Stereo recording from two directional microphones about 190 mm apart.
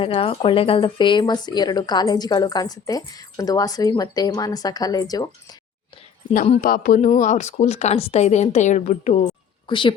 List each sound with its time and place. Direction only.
0.0 s speech: 30° left (ahead or behind)
6.3 s a woman's voice: 40° left (ahead or behind)
9.6 s speech: 25° left (ahead or behind)